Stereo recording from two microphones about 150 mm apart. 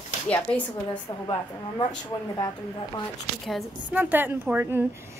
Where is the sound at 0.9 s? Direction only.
30° left (ahead or behind).